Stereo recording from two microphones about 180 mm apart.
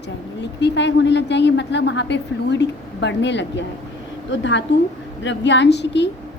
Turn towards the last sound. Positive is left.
turn(degrees=75)  # may be behind; listen again after turning